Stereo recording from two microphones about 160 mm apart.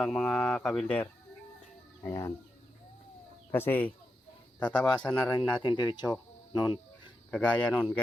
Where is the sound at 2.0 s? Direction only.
20° left (ahead or behind).